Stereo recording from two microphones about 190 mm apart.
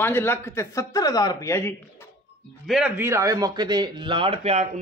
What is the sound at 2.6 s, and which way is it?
Speech, centre (ahead or behind).